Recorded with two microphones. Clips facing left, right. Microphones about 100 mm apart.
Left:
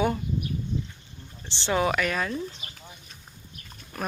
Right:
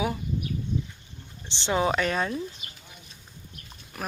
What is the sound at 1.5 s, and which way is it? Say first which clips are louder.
Speech: even; 20° right (ahead or behind).